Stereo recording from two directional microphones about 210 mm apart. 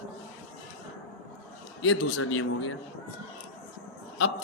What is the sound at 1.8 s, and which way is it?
Speech, 65° left (ahead or behind).